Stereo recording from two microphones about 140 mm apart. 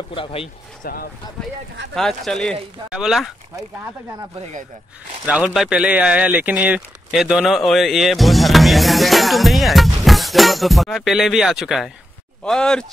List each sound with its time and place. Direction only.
0.1 s speech: 40° left (ahead or behind)
0.8 s speech: 90° left
2.0 s speech: centre (ahead or behind)
4.4 s speech: 55° right (ahead or behind)
5.2 s speech: 5° right (ahead or behind)